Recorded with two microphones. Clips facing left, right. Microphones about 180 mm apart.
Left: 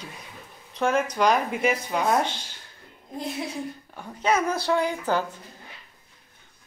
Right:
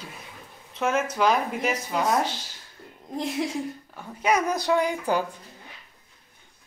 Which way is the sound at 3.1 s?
90° right.